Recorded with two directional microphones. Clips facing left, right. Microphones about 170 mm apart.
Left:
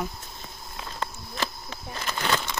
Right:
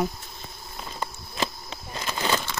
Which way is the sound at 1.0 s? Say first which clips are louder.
Right 2 dB; 15° right (ahead or behind).